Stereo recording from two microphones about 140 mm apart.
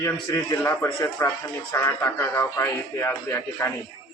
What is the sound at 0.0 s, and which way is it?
A man's voice, 20° left (ahead or behind).